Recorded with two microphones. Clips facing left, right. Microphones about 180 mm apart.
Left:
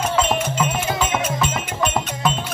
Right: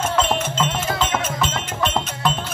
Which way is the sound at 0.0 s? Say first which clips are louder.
Left 1 dB; centre (ahead or behind).